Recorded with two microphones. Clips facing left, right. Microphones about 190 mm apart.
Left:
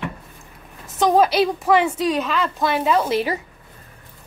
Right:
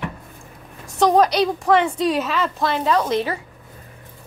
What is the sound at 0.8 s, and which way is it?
A woman's voice, centre (ahead or behind).